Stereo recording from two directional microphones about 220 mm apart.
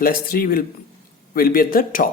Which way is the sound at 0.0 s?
40° left (ahead or behind).